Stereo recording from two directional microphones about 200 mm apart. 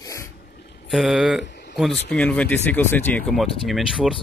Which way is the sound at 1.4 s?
60° left (ahead or behind).